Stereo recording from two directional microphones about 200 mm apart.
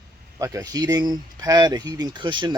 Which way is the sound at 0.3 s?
15° right (ahead or behind).